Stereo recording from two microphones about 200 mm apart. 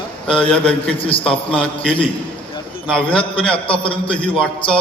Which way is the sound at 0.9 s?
25° left (ahead or behind).